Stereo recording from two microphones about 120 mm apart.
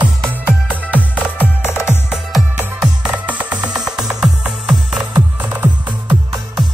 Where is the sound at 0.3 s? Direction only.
15° right (ahead or behind).